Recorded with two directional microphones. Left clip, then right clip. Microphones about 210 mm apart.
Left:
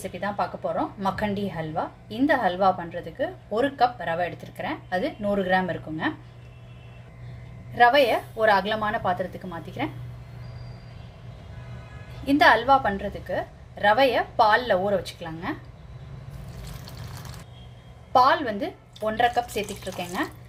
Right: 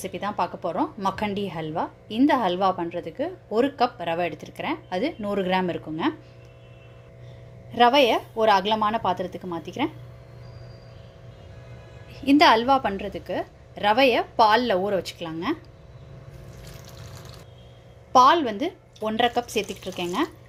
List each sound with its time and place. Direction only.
0.0 s a woman's voice: 35° right (ahead or behind)
7.8 s a woman's voice: 35° right (ahead or behind)
12.2 s a woman's voice: 40° right (ahead or behind)
18.1 s a woman's voice: 35° right (ahead or behind)